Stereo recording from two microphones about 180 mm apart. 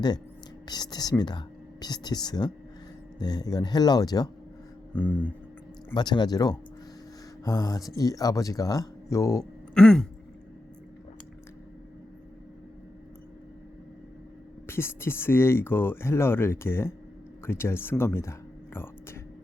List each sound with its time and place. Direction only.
0.7 s speech: 20° left (ahead or behind)
4.9 s speech: 10° left (ahead or behind)
5.9 s speech: 25° left (ahead or behind)
9.7 s a sound: 5° left (ahead or behind)
14.7 s speech: 15° left (ahead or behind)